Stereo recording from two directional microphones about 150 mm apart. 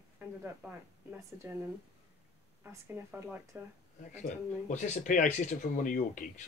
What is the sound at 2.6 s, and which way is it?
Speech, 15° right (ahead or behind).